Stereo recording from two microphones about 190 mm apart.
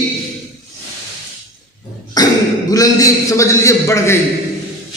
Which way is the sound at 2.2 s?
20° left (ahead or behind).